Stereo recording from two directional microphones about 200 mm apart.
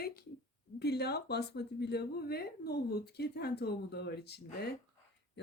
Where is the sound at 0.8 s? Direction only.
55° left (ahead or behind).